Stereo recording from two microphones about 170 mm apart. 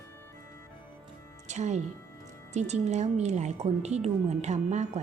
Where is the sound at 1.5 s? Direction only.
40° right (ahead or behind).